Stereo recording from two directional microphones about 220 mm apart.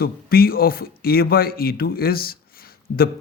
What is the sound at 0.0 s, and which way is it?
Speech, 45° left (ahead or behind).